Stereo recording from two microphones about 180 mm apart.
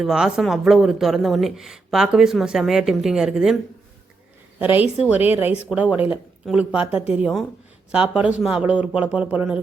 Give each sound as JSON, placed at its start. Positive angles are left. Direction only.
{"t": 0.0, "sound": "speech", "side_deg": -5}
{"t": 4.6, "sound": "speech", "side_deg": -10}